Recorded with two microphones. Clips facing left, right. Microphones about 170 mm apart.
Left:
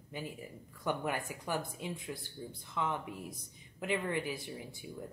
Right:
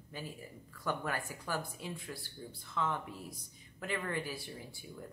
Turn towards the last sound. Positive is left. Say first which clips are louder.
# left 3 dB
turn(degrees=20)  # may be behind; listen again after turning